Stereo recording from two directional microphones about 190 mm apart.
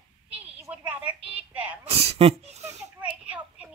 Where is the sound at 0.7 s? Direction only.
5° right (ahead or behind).